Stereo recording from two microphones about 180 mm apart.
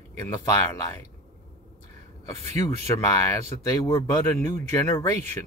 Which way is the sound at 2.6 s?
15° left (ahead or behind).